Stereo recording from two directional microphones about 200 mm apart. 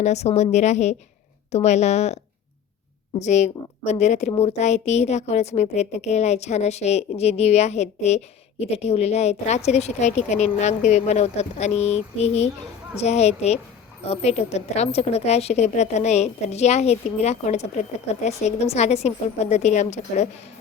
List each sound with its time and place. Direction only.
0.0 s a woman's voice: 35° left (ahead or behind)
3.2 s a woman's voice: 35° left (ahead or behind)